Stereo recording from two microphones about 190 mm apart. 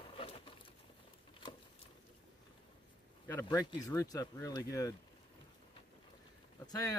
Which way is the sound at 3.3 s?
15° left (ahead or behind).